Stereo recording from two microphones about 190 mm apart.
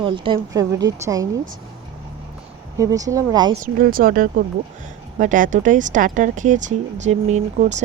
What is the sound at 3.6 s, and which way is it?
A woman's voice, 50° right (ahead or behind).